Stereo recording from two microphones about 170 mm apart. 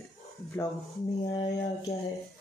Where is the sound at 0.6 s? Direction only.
15° left (ahead or behind).